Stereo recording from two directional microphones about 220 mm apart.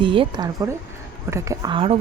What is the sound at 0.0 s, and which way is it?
Speech, 20° right (ahead or behind).